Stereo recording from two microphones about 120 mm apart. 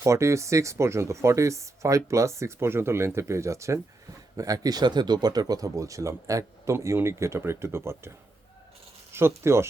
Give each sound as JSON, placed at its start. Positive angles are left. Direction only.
{"t": 0.0, "sound": "speech", "side_deg": -25}
{"t": 9.1, "sound": "speech", "side_deg": -20}